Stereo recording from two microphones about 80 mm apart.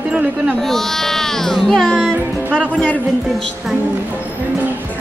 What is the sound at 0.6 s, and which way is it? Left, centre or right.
Speech, centre.